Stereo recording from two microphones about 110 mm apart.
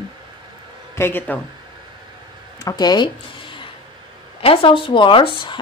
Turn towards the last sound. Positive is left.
turn(degrees=50)  # may be behind; listen again after turning